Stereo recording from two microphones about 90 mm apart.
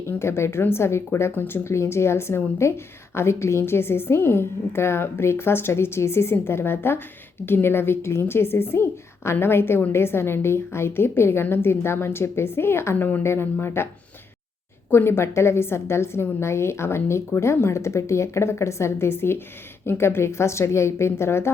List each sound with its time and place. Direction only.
0.1 s a woman's voice: 30° left (ahead or behind)
14.8 s a woman's voice: 25° left (ahead or behind)